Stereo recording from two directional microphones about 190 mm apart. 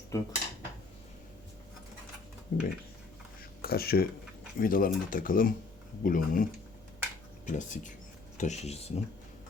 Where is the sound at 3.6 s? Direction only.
55° left (ahead or behind); by 8.9 s 35° left (ahead or behind).